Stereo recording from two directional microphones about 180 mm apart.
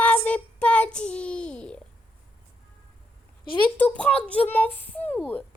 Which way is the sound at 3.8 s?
10° left (ahead or behind).